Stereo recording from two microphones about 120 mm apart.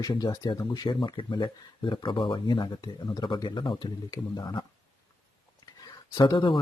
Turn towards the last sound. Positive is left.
turn(degrees=45)  # may be behind; listen again after turning